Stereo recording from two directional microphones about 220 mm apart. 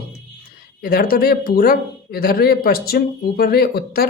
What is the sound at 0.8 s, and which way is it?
Speech, 40° left (ahead or behind).